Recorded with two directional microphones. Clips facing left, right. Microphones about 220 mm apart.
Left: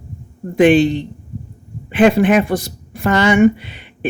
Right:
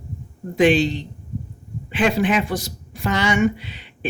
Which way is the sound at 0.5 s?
55° left (ahead or behind).